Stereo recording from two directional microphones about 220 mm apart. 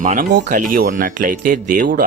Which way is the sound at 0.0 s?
35° right (ahead or behind).